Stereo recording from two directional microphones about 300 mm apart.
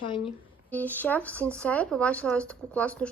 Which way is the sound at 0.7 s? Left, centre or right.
Centre.